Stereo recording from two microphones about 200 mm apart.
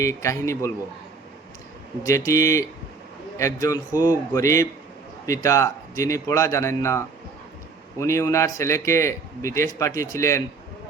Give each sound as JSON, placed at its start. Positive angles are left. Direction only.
{"t": 0.0, "sound": "a man's voice", "side_deg": 15}
{"t": 2.0, "sound": "a man's voice", "side_deg": 15}